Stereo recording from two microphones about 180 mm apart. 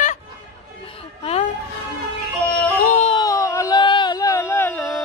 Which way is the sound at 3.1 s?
20° left (ahead or behind).